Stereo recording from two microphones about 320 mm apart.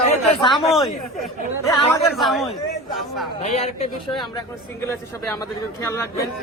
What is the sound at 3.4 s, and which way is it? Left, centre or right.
Speech, centre.